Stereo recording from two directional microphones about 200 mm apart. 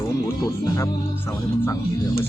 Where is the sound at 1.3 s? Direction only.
10° left (ahead or behind).